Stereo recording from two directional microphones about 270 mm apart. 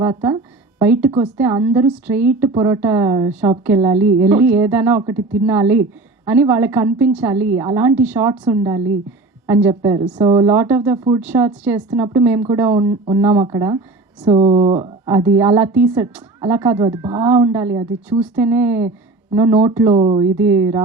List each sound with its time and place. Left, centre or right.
0.0 s a woman's voice: centre